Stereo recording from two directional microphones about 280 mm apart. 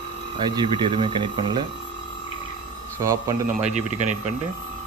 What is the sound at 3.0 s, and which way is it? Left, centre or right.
Speech, centre.